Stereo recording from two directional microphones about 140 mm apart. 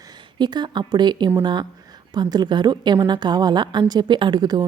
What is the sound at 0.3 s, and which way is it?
A woman's voice, 30° right (ahead or behind).